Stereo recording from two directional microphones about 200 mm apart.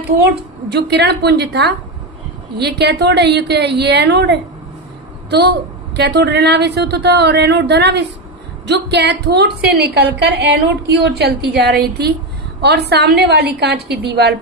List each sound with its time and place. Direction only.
0.7 s a woman's voice: 55° right (ahead or behind)